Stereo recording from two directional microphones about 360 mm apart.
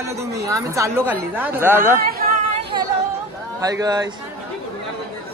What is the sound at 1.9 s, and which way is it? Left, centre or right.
Chatter, right.